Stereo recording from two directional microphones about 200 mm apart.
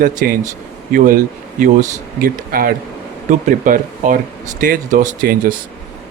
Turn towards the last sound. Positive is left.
turn(degrees=-40)  # may be behind; listen again after turning